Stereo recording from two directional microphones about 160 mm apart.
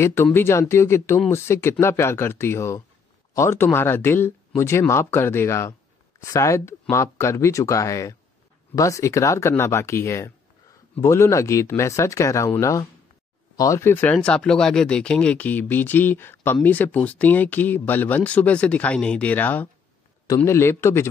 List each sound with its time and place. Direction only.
0.0 s speech: 15° left (ahead or behind)